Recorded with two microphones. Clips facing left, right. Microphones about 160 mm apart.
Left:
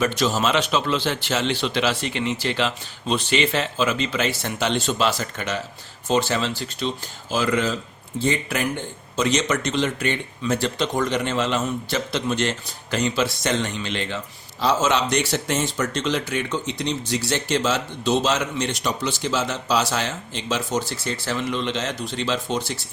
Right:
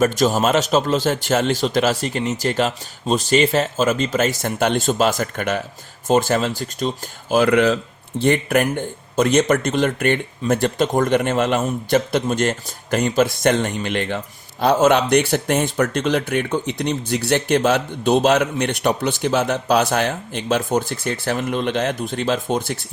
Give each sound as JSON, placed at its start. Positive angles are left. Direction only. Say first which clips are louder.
{"t": 0.0, "sound": "speech", "louder": "right 5 dB", "side_deg": -45}